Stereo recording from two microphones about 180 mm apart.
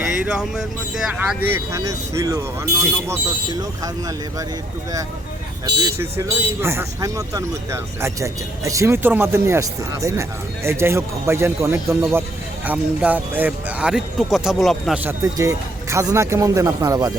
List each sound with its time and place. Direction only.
0.0 s speech: 5° right (ahead or behind)
5.8 s speech: 15° right (ahead or behind)
15.2 s speech: 20° right (ahead or behind)